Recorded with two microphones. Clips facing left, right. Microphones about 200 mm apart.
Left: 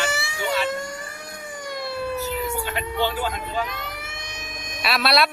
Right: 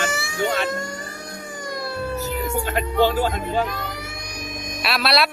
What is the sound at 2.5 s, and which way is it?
Speech, 45° right (ahead or behind).